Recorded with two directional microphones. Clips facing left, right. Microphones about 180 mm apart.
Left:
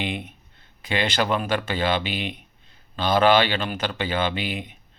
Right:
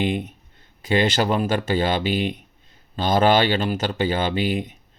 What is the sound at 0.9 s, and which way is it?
Speech, 40° right (ahead or behind).